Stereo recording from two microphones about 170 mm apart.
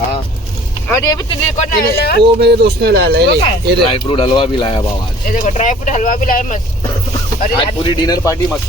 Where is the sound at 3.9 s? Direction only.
30° left (ahead or behind).